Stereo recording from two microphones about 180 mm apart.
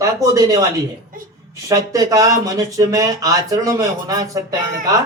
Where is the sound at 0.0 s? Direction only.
15° right (ahead or behind).